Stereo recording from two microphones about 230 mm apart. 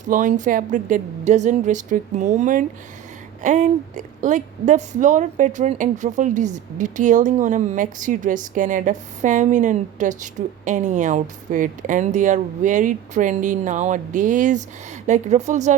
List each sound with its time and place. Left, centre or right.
0.0 s a woman's voice: right